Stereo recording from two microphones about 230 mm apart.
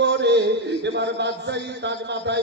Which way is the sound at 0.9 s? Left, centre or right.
Right.